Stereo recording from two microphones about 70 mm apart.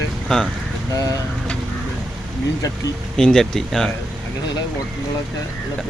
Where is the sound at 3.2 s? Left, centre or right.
Centre.